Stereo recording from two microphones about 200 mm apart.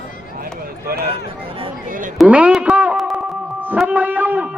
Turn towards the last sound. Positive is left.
turn(degrees=-10)  # may be behind; listen again after turning